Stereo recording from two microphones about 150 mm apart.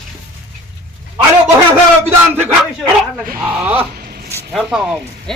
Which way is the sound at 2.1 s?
15° right (ahead or behind).